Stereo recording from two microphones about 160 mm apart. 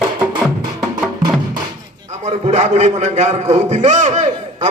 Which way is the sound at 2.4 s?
45° right (ahead or behind).